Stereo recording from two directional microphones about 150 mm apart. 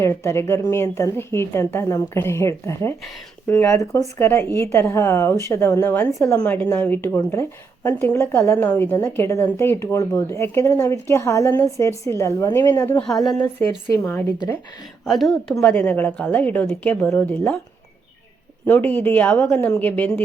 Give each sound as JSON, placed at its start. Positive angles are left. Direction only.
{"t": 0.0, "sound": "a woman's voice", "side_deg": 20}
{"t": 13.0, "sound": "a woman's voice", "side_deg": 0}
{"t": 15.0, "sound": "a woman's voice", "side_deg": 0}
{"t": 15.6, "sound": "a woman's voice", "side_deg": 10}
{"t": 18.6, "sound": "a woman's voice", "side_deg": 10}